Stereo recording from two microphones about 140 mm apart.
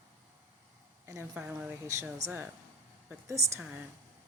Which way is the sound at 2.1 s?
20° right (ahead or behind).